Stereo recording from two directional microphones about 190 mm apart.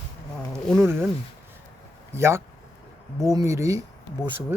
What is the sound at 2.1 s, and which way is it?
Speech, 15° right (ahead or behind).